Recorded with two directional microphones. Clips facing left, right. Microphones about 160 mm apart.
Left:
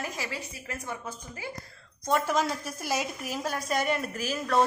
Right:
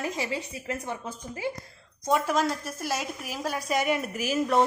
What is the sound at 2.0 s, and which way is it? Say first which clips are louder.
A woman's voice: right 2 dB; 5° right (ahead or behind).